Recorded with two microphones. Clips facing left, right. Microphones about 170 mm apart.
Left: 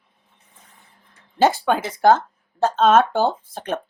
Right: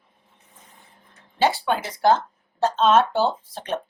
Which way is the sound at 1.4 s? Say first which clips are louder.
Left 4 dB; 45° left (ahead or behind).